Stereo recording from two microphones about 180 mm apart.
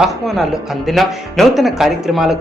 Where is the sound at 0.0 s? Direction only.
Centre (ahead or behind).